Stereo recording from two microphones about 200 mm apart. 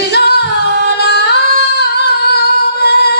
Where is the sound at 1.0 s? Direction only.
55° left (ahead or behind).